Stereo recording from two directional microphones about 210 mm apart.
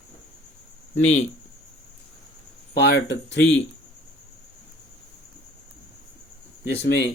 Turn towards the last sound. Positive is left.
turn(degrees=55)  # may be behind; listen again after turning